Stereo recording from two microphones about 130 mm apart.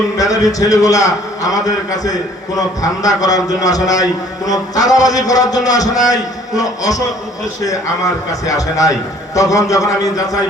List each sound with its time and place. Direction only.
0.2 s a man's voice: 25° left (ahead or behind)
8.3 s a man's voice: 25° left (ahead or behind)